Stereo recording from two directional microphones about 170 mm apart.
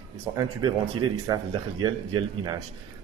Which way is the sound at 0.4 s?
25° right (ahead or behind).